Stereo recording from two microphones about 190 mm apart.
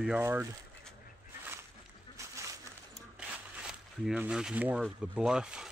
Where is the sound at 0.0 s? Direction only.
5° right (ahead or behind).